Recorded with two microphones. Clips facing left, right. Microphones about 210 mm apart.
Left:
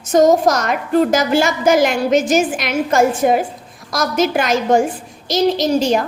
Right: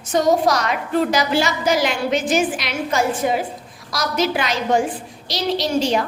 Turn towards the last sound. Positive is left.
turn(degrees=45)  # may be behind; listen again after turning